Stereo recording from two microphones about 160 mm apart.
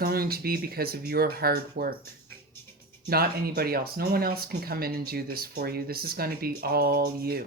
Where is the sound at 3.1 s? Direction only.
70° right (ahead or behind).